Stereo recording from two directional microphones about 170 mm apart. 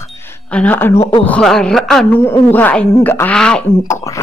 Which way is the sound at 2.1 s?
10° left (ahead or behind).